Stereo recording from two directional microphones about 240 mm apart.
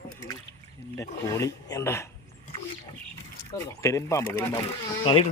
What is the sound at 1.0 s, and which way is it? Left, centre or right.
Speech, centre.